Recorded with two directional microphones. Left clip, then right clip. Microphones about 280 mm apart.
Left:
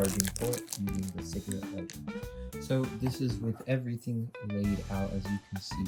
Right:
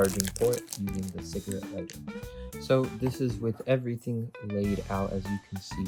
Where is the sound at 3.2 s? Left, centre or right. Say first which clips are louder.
Right 5 dB; centre.